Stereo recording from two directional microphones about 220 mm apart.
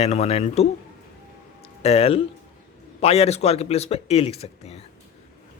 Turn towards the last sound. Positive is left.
turn(degrees=25)  # may be behind; listen again after turning